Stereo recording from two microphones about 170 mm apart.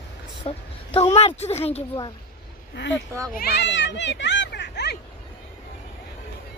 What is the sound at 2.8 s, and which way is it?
Speech, 90° left.